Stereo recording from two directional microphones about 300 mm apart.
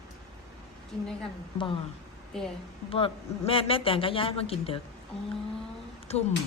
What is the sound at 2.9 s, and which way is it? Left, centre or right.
A man's voice, centre.